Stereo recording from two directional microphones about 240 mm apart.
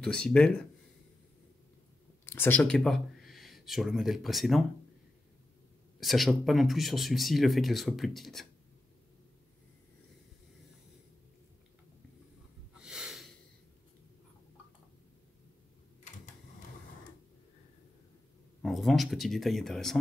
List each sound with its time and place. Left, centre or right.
0.0 s speech: centre
2.2 s speech: centre
5.9 s speech: centre
12.8 s snort: centre
18.6 s speech: centre